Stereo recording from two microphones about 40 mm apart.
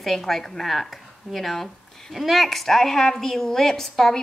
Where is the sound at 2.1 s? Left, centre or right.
Centre.